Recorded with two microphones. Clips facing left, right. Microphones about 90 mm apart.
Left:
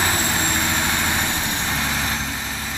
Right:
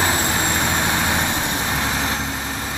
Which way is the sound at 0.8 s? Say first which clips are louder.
Right 2 dB; 20° right (ahead or behind).